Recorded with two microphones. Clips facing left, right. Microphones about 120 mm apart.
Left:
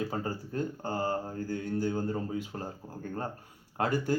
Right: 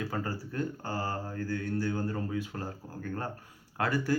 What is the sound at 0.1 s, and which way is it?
Speech, 25° left (ahead or behind).